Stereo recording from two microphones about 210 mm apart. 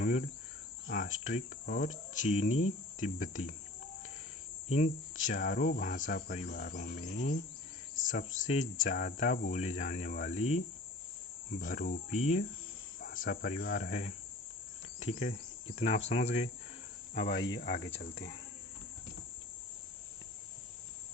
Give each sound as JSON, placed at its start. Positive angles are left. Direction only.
{"t": 0.0, "sound": "cricket", "side_deg": 35}
{"t": 0.9, "sound": "speech", "side_deg": 40}
{"t": 4.7, "sound": "speech", "side_deg": 35}
{"t": 14.9, "sound": "cricket", "side_deg": 30}
{"t": 17.2, "sound": "cricket", "side_deg": 55}
{"t": 17.6, "sound": "speech", "side_deg": 45}